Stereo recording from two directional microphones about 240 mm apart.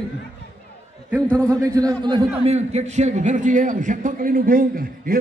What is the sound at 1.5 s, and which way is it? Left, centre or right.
A man's voice, centre.